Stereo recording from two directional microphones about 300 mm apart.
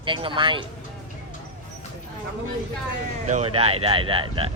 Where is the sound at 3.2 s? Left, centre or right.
Right.